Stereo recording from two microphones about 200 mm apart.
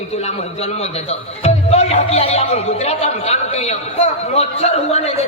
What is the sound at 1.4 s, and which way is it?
Speech, 30° left (ahead or behind).